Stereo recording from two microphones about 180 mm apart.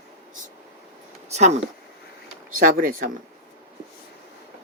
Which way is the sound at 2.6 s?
50° right (ahead or behind).